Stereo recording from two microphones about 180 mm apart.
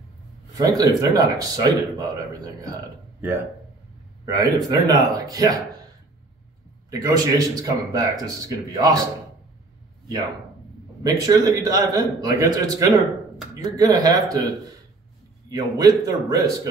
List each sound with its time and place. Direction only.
0.6 s speech: 20° right (ahead or behind)
4.3 s speech: 20° right (ahead or behind)
6.9 s speech: 20° right (ahead or behind)
11.1 s speech: 20° right (ahead or behind)
15.5 s speech: 20° right (ahead or behind)